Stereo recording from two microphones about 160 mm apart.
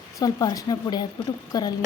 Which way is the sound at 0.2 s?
20° left (ahead or behind).